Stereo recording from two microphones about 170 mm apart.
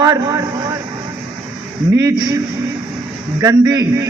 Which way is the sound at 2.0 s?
20° right (ahead or behind).